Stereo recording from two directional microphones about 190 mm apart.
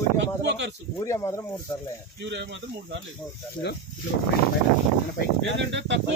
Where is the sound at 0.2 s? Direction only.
70° right (ahead or behind).